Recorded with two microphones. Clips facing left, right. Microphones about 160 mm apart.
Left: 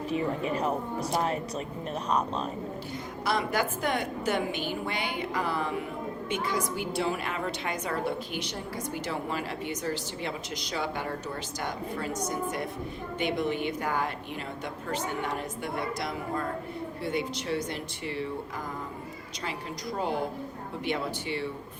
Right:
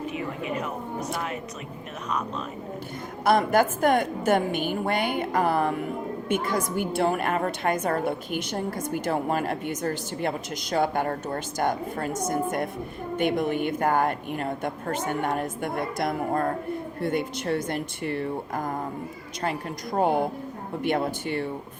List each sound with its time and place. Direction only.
0.1 s a woman's voice: 35° left (ahead or behind)
3.2 s a woman's voice: 50° right (ahead or behind)